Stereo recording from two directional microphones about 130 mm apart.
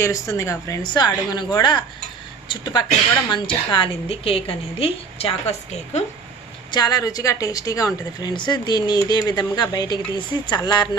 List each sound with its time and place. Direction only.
0.0 s a woman's voice: 20° left (ahead or behind); by 6.1 s 55° left (ahead or behind)
6.7 s a woman's voice: 30° left (ahead or behind)